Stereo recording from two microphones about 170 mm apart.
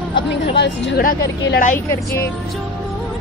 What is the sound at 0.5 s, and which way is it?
Speech, 90° left.